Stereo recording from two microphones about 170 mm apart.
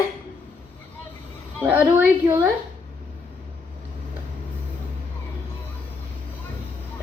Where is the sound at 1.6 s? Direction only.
10° right (ahead or behind).